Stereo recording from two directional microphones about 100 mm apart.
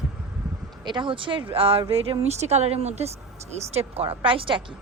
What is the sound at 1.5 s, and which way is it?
Speech, 70° right (ahead or behind).